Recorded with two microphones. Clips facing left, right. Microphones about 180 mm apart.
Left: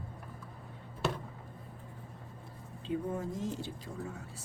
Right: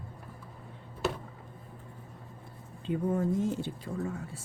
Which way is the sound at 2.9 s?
55° right (ahead or behind).